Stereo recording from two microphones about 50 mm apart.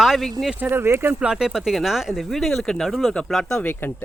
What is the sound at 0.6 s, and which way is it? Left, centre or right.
Speech, right.